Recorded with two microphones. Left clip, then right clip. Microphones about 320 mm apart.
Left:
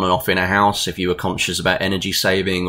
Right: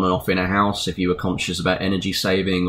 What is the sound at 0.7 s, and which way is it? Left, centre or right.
Speech, left.